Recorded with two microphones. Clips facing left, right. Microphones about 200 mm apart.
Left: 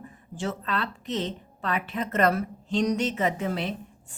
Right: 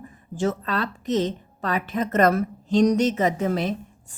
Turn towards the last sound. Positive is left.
turn(degrees=-45)  # may be behind; listen again after turning